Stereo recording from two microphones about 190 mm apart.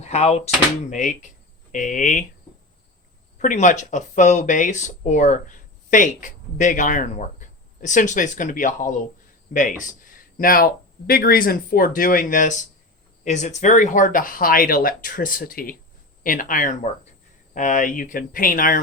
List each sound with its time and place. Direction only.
0.0 s speech: 35° left (ahead or behind)
3.3 s speech: 40° left (ahead or behind)